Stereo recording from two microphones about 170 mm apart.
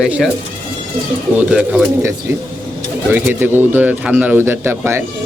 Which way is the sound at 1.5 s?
5° right (ahead or behind).